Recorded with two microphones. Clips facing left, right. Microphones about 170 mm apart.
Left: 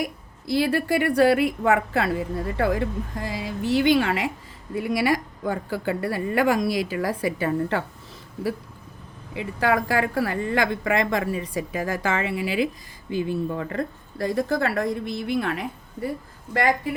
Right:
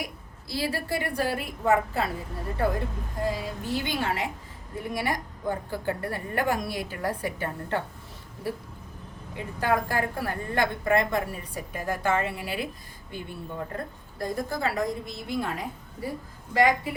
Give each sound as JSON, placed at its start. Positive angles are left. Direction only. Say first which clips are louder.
{"t": 0.4, "sound": "a woman's voice", "louder": "left 8 dB", "side_deg": 60}
{"t": 9.3, "sound": "a woman's voice", "louder": "left 4 dB", "side_deg": 90}